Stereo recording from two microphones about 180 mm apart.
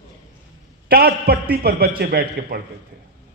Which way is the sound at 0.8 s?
60° right (ahead or behind).